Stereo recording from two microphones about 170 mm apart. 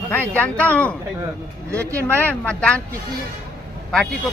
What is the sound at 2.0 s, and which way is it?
Speech, 10° left (ahead or behind).